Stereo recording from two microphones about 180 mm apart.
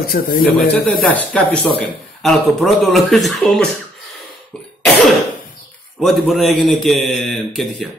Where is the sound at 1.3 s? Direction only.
5° left (ahead or behind).